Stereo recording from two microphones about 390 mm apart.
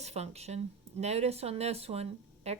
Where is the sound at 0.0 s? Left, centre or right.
Centre.